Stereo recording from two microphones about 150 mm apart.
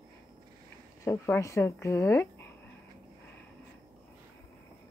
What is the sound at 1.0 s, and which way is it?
A woman's voice, 15° left (ahead or behind).